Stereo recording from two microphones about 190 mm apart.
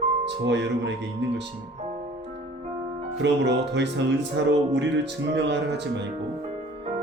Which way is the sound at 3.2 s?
65° right (ahead or behind).